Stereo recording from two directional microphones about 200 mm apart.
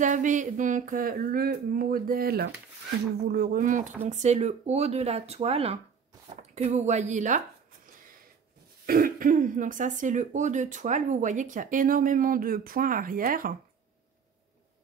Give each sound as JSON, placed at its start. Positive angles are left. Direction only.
{"t": 0.0, "sound": "speech", "side_deg": -40}
{"t": 8.8, "sound": "speech", "side_deg": -45}